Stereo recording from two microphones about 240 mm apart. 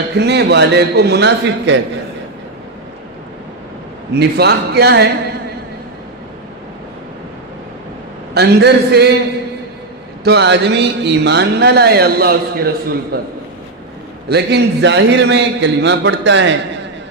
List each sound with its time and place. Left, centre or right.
0.2 s a man's voice: right
4.1 s a man's voice: right
8.3 s a man's voice: right
10.2 s a man's voice: right